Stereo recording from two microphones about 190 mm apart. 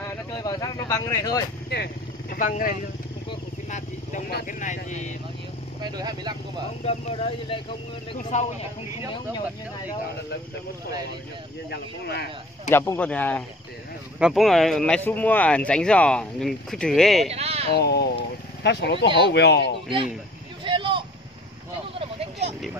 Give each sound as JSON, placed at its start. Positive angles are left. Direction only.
{"t": 0.3, "sound": "a sound", "side_deg": 20}
{"t": 2.3, "sound": "speech", "side_deg": 45}
{"t": 4.3, "sound": "speech", "side_deg": 55}
{"t": 4.6, "sound": "speech", "side_deg": 40}
{"t": 5.8, "sound": "speech", "side_deg": -20}
{"t": 6.8, "sound": "speech", "side_deg": 30}
{"t": 11.7, "sound": "speech", "side_deg": 55}
{"t": 12.7, "sound": "speech", "side_deg": 10}
{"t": 17.3, "sound": "speech", "side_deg": -35}
{"t": 17.7, "sound": "vehicle", "side_deg": 60}
{"t": 19.1, "sound": "speech", "side_deg": 60}
{"t": 20.6, "sound": "a sound", "side_deg": -25}